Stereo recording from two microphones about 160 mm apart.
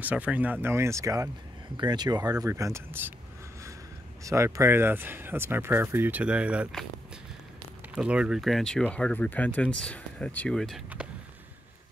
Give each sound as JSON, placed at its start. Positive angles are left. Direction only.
{"t": 0.0, "sound": "speech", "side_deg": -10}
{"t": 4.2, "sound": "speech", "side_deg": -20}
{"t": 7.9, "sound": "speech", "side_deg": -5}
{"t": 11.0, "sound": "a sound", "side_deg": -5}